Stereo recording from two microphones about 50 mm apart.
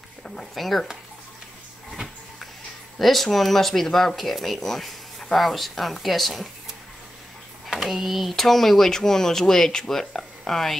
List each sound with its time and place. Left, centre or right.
0.6 s speech: centre
3.0 s speech: centre
7.7 s speech: centre